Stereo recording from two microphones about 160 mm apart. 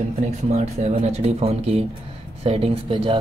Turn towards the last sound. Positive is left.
turn(degrees=-35)  # may be behind; listen again after turning